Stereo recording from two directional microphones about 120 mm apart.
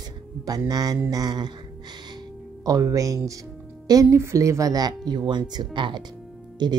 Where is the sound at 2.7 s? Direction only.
30° right (ahead or behind).